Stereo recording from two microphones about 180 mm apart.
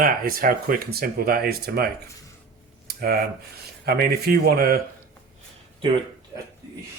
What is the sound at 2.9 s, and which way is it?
Speech, 60° right (ahead or behind).